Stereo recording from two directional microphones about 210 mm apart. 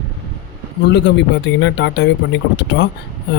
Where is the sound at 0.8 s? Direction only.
55° left (ahead or behind).